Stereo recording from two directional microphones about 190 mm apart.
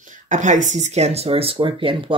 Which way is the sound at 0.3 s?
40° right (ahead or behind).